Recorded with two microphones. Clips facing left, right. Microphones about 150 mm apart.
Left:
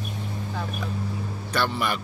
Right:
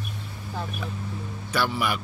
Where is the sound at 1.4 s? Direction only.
5° right (ahead or behind).